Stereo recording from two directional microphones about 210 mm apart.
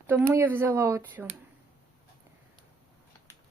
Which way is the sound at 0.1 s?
10° right (ahead or behind).